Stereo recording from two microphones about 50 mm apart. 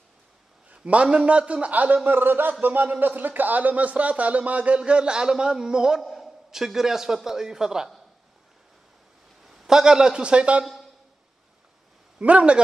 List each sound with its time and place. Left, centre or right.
0.7 s speech: right
2.0 s speech: right; by 5.9 s centre
5.9 s a man's voice: centre
9.4 s a man's voice: centre; by 10.6 s right
12.2 s speech: right